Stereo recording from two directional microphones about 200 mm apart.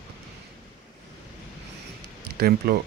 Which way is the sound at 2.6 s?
50° right (ahead or behind).